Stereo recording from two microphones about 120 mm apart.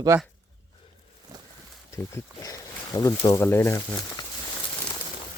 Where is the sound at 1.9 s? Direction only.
25° left (ahead or behind).